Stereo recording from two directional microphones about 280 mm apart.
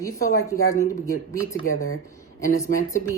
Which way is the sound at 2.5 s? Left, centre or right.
Centre.